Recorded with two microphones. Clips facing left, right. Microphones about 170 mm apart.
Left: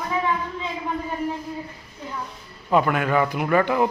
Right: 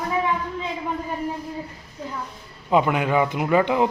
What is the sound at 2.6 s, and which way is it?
Speech, 15° right (ahead or behind).